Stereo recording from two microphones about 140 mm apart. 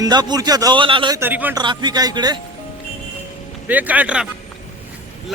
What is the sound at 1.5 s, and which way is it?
Speech, 30° right (ahead or behind).